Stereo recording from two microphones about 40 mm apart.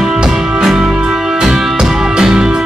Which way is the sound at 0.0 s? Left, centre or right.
Centre.